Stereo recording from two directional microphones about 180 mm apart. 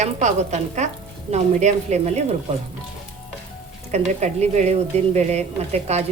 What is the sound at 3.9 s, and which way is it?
A woman's voice, 40° right (ahead or behind).